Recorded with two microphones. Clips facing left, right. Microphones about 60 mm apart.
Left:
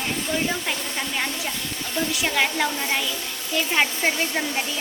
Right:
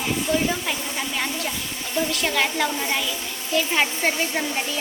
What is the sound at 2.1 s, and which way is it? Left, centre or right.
A woman's voice, centre.